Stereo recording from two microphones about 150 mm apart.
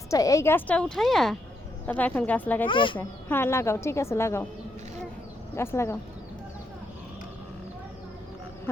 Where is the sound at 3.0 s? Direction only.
15° left (ahead or behind).